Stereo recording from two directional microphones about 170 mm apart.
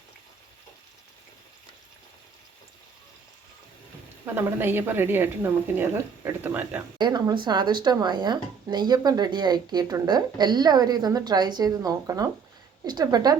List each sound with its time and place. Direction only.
4.4 s speech: 15° right (ahead or behind)
7.0 s speech: 25° right (ahead or behind)